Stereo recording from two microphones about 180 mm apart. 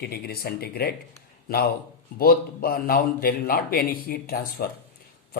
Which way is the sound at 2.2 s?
55° left (ahead or behind).